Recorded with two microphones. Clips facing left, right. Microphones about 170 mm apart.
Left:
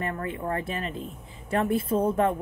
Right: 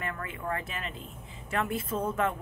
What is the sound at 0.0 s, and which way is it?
A woman's voice, 35° left (ahead or behind).